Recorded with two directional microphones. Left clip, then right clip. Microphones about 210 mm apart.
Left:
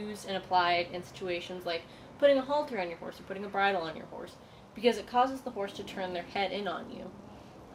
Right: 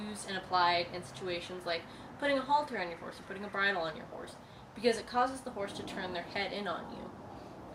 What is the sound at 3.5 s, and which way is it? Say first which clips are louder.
A woman's voice: left 3 dB; 20° left (ahead or behind).